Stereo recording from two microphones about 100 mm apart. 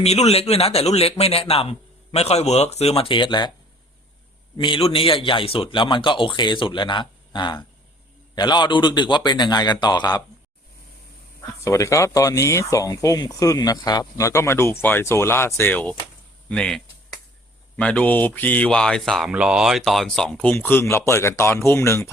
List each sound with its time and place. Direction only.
0.0 s a man's voice: 90° left
2.1 s speech: 90° left; by 3.5 s 50° left (ahead or behind)
4.5 s a man's voice: 50° left (ahead or behind)
4.8 s a man's voice: 65° left (ahead or behind); by 10.2 s 45° left (ahead or behind)
11.6 s speech: 30° left (ahead or behind); by 19.3 s centre (ahead or behind)
19.3 s speech: 10° right (ahead or behind)
20.4 s speech: 15° left (ahead or behind)